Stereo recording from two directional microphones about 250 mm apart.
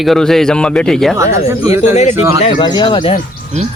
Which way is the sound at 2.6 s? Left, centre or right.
Centre.